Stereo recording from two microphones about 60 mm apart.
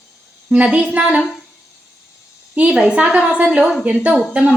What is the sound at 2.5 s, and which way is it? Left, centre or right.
A woman's voice, right.